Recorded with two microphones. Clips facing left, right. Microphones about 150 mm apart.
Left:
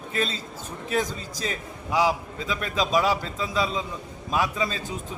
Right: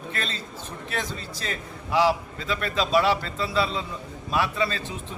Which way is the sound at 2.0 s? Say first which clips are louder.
Right 2 dB; 10° left (ahead or behind).